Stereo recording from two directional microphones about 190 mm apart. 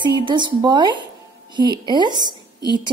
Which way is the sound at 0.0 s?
25° right (ahead or behind).